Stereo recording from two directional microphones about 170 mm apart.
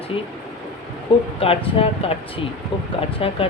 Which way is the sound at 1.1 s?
30° left (ahead or behind).